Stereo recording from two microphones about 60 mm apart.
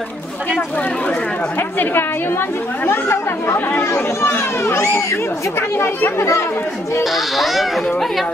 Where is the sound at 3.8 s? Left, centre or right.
Left.